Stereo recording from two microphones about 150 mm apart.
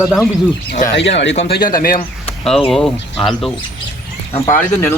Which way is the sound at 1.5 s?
75° left (ahead or behind).